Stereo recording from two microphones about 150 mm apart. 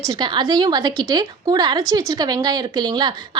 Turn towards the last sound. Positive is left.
turn(degrees=-30)  # may be behind; listen again after turning